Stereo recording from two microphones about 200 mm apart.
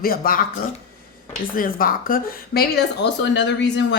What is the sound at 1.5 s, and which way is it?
Speech, 45° left (ahead or behind).